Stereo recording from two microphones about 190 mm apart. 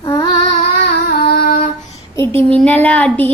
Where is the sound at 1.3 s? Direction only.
55° left (ahead or behind).